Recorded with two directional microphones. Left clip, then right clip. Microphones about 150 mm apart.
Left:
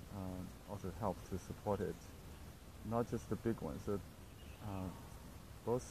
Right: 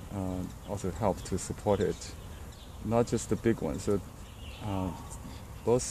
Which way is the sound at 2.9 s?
20° right (ahead or behind).